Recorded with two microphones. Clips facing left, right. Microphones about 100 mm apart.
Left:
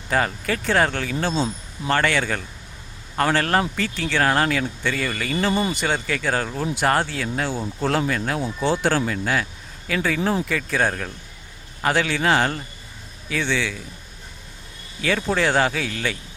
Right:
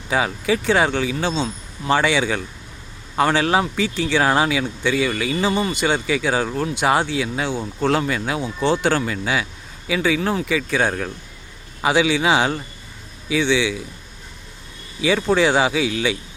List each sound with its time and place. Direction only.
0.1 s speech: 5° right (ahead or behind)
15.0 s speech: 5° right (ahead or behind)